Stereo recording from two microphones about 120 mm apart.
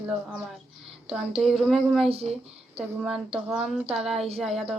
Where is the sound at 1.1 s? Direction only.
Centre (ahead or behind).